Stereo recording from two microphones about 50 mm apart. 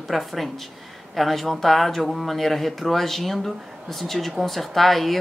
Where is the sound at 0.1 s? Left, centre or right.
Centre.